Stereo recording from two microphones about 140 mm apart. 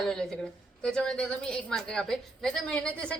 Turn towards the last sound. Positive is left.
turn(degrees=5)  # may be behind; listen again after turning